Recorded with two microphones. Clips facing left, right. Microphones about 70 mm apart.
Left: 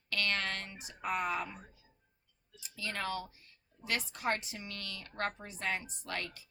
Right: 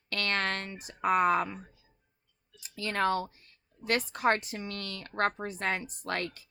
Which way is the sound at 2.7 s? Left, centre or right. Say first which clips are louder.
Right 9 dB; right.